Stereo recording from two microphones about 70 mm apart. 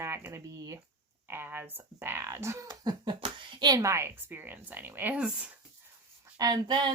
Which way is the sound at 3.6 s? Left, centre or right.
Right.